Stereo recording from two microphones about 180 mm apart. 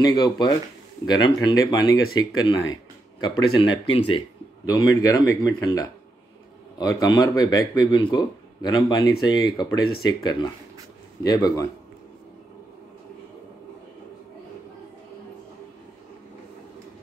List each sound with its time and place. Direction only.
0.0 s speech: 20° left (ahead or behind)